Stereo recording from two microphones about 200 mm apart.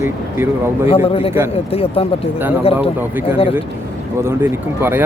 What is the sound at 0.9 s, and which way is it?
A man's voice, 30° left (ahead or behind).